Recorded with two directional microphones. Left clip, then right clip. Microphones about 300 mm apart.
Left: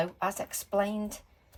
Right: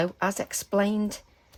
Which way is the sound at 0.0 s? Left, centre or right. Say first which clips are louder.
Right 4 dB; right.